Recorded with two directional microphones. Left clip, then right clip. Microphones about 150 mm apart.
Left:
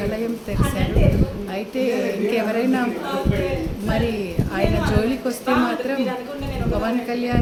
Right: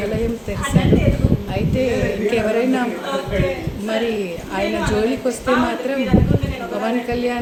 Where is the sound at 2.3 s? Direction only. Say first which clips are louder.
Right 4 dB; 20° right (ahead or behind).